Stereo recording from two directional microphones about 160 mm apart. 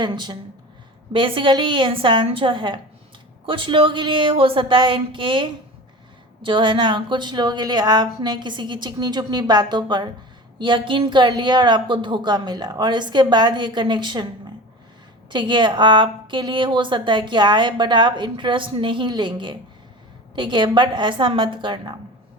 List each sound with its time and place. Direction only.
0.0 s a woman's voice: 25° right (ahead or behind)
15.3 s a woman's voice: 30° right (ahead or behind)